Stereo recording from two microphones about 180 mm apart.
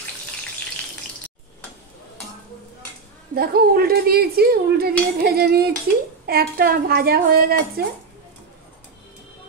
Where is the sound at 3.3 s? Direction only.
60° right (ahead or behind).